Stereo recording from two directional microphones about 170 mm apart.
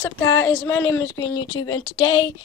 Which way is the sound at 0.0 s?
15° left (ahead or behind).